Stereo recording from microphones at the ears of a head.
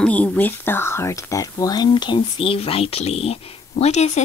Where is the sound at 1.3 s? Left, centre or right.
Left.